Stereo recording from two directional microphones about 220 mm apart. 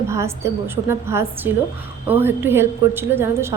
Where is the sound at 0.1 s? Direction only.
10° right (ahead or behind).